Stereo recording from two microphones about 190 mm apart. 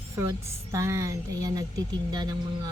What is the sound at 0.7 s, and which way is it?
Speech, 15° right (ahead or behind).